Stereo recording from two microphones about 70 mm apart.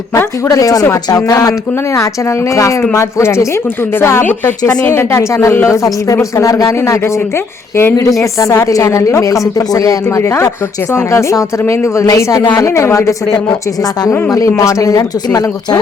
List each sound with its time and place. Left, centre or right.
0.1 s speech: left
2.9 s a woman's voice: left
4.3 s a woman's voice: left
8.2 s a woman's voice: left
10.9 s a woman's voice: left
14.3 s a woman's voice: left